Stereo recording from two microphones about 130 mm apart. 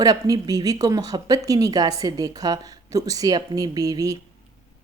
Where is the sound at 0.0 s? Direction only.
30° right (ahead or behind).